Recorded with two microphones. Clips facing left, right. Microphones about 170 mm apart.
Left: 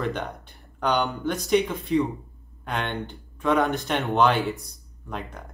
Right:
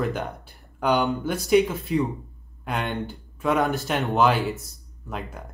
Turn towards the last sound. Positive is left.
turn(degrees=-5)  # may be behind; listen again after turning